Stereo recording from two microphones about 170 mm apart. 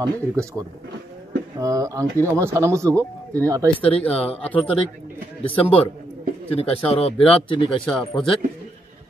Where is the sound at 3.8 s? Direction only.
5° left (ahead or behind).